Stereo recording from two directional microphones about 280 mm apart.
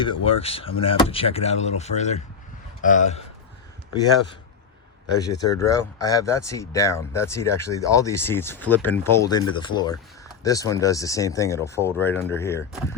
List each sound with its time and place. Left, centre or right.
0.0 s speech: centre
5.4 s speech: centre